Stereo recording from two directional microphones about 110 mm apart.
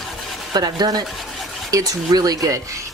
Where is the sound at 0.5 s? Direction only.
35° right (ahead or behind).